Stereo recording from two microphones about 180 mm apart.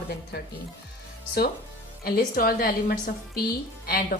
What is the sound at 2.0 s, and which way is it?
A woman's voice, 55° left (ahead or behind).